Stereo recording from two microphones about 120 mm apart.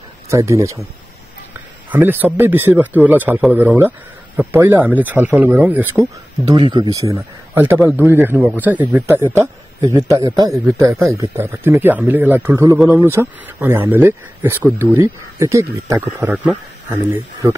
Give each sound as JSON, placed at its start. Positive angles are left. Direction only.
{"t": 0.3, "sound": "speech", "side_deg": -25}
{"t": 1.9, "sound": "speech", "side_deg": -15}
{"t": 6.5, "sound": "speech", "side_deg": -40}